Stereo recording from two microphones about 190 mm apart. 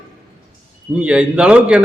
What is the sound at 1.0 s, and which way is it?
Speech, 5° right (ahead or behind).